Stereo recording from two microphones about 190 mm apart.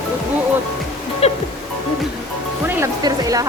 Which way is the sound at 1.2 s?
35° left (ahead or behind).